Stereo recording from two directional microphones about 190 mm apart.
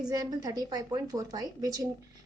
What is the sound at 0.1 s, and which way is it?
A woman's voice, 20° right (ahead or behind).